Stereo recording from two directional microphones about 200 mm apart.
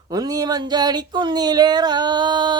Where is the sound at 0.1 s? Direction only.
20° right (ahead or behind).